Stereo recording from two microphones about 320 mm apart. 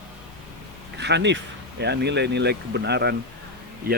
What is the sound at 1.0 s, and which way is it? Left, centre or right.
Speech, right.